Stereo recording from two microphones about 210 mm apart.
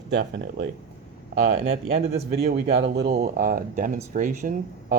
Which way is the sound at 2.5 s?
50° right (ahead or behind).